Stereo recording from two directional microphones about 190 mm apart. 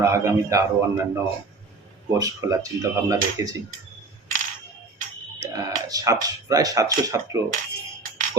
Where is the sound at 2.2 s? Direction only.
20° right (ahead or behind).